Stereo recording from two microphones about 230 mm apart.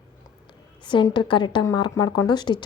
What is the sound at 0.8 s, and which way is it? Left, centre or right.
A woman's voice, centre.